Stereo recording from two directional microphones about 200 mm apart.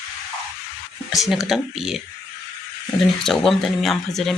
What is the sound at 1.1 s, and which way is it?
Speech, centre (ahead or behind).